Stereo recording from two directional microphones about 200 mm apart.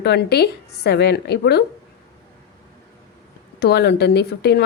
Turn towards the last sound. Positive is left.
turn(degrees=55)  # may be behind; listen again after turning